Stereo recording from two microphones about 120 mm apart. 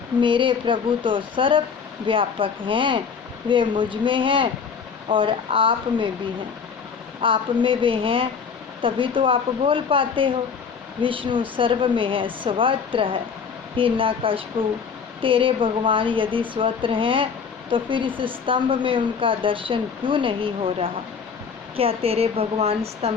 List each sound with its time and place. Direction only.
0.2 s a woman's voice: 45° right (ahead or behind)
7.2 s a woman's voice: 45° right (ahead or behind)